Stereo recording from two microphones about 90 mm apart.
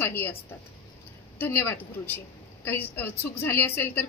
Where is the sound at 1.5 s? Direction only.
30° left (ahead or behind).